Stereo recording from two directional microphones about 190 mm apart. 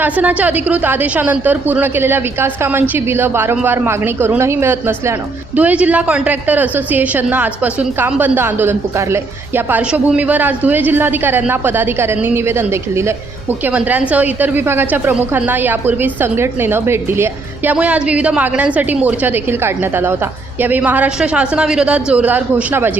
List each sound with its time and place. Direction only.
0.0 s a woman's voice: 10° right (ahead or behind)